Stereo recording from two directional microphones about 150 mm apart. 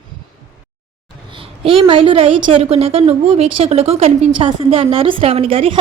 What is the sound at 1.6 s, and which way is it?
A woman's voice, 35° right (ahead or behind).